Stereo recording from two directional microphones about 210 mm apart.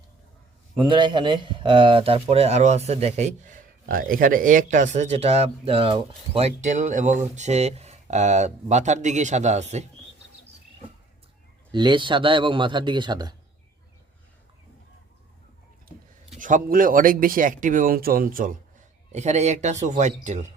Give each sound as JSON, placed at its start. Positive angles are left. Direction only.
{"t": 0.8, "sound": "speech", "side_deg": -20}
{"t": 11.7, "sound": "a man's voice", "side_deg": -20}
{"t": 16.4, "sound": "speech", "side_deg": -40}